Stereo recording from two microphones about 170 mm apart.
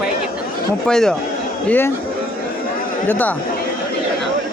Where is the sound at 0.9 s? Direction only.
5° left (ahead or behind).